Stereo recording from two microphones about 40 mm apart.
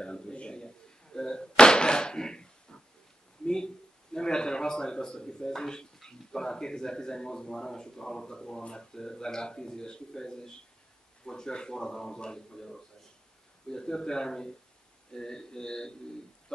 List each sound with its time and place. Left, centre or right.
0.0 s a sound: left
1.1 s slam: centre
3.4 s a man's voice: centre